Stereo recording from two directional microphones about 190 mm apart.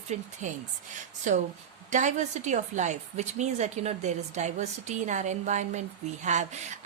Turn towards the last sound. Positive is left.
turn(degrees=-40)  # may be behind; listen again after turning